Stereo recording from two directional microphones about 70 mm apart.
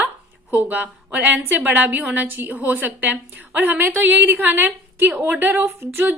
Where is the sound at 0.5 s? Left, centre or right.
Right.